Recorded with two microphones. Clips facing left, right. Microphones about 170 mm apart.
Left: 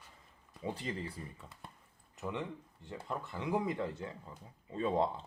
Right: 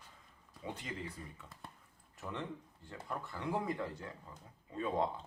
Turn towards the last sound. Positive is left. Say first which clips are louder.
# left 3 dB
turn(degrees=30)  # may be behind; listen again after turning